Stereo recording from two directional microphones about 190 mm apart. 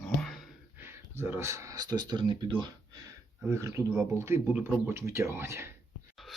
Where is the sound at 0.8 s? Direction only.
10° right (ahead or behind).